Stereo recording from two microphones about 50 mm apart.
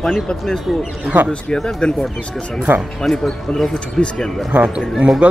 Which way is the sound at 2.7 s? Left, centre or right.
Right.